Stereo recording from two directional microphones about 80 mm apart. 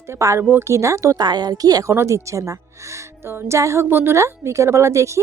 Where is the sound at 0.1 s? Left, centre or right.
Right.